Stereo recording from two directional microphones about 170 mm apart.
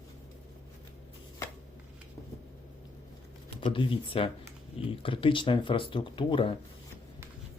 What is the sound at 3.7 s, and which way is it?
Speech, 30° left (ahead or behind).